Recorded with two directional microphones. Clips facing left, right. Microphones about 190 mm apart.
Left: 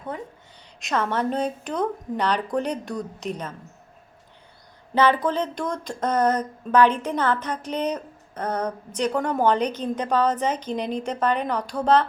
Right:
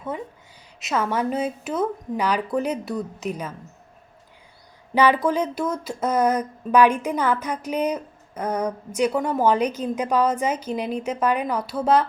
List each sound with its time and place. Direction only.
0.8 s speech: 5° right (ahead or behind)
4.9 s speech: 10° right (ahead or behind)